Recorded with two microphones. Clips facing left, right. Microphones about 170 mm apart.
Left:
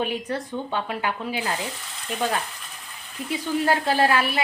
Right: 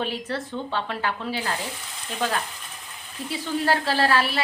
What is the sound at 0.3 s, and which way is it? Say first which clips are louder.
A woman's voice: left 1 dB; 15° left (ahead or behind).